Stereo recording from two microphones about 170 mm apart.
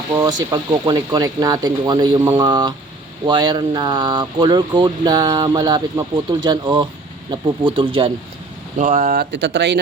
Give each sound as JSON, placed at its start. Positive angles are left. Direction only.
{"t": 0.1, "sound": "speech", "side_deg": -25}
{"t": 8.8, "sound": "speech", "side_deg": -45}
{"t": 9.3, "sound": "speech", "side_deg": -90}